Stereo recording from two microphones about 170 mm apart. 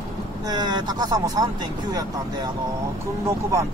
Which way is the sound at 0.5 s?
25° right (ahead or behind).